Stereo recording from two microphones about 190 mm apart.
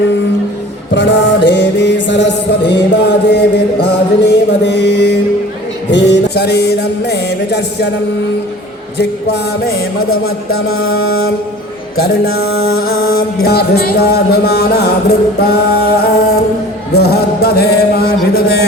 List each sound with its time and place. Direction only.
0.9 s music: 65° left (ahead or behind)
9.0 s music: 60° left (ahead or behind)
12.0 s music: 55° left (ahead or behind)